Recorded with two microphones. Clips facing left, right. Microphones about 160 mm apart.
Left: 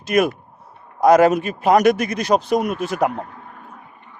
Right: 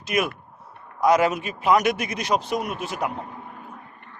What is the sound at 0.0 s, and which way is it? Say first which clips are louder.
Speech: left 7 dB; 45° left (ahead or behind).